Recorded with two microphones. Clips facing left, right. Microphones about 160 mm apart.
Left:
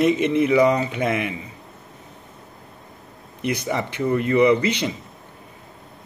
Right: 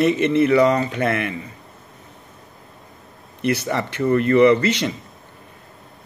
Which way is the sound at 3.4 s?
15° left (ahead or behind).